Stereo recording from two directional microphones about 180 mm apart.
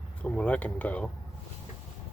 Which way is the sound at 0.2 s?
10° left (ahead or behind).